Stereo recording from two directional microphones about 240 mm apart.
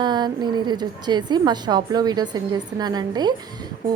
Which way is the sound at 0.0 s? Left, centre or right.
Centre.